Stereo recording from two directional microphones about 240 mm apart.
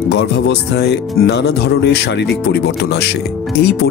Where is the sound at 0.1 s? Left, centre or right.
Left.